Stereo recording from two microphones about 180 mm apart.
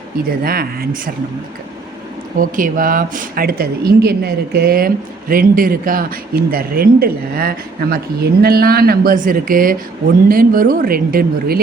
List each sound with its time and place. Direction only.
0.4 s speech: 55° right (ahead or behind)
2.4 s speech: 50° right (ahead or behind)